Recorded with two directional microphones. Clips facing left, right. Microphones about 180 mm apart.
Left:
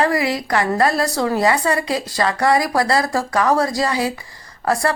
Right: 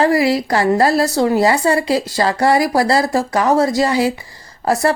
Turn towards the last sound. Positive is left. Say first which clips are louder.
# right 3 dB
turn(degrees=-25)  # may be behind; listen again after turning